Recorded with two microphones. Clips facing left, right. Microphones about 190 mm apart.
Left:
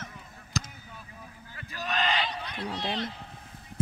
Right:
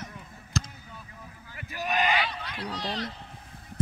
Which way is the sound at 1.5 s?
15° right (ahead or behind).